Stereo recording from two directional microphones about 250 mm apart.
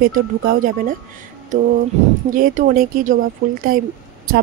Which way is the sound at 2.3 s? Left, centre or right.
Right.